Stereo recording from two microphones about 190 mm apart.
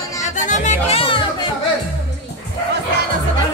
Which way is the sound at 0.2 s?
40° left (ahead or behind).